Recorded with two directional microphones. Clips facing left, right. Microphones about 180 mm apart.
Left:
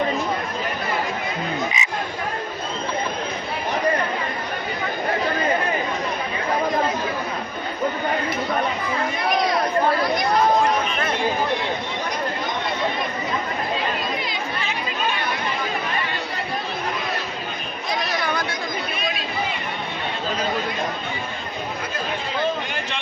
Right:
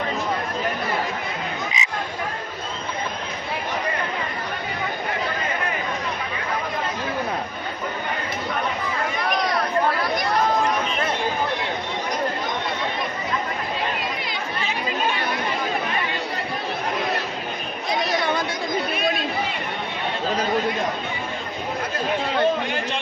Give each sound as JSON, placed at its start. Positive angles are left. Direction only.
{"t": 1.7, "sound": "croak", "side_deg": 55}